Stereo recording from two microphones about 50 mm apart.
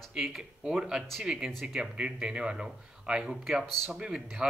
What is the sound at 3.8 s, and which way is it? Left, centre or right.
Speech, centre.